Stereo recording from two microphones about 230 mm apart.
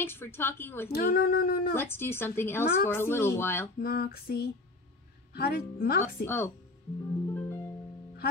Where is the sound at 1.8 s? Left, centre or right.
Centre.